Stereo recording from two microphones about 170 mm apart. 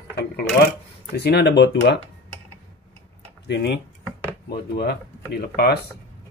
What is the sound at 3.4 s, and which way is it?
Speech, 80° left.